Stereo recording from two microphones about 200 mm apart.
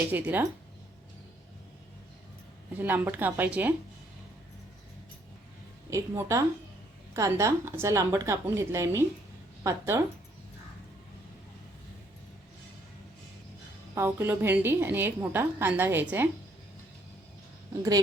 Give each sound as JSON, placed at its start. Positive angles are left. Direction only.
{"t": 0.1, "sound": "a woman's voice", "side_deg": -10}
{"t": 2.7, "sound": "a woman's voice", "side_deg": -10}
{"t": 5.9, "sound": "a woman's voice", "side_deg": -15}
{"t": 13.9, "sound": "a woman's voice", "side_deg": -10}